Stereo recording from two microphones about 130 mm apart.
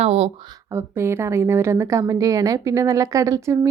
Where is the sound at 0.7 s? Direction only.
20° right (ahead or behind).